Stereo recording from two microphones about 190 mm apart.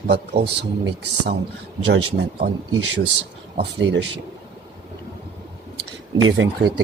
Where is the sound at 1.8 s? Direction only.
75° right (ahead or behind).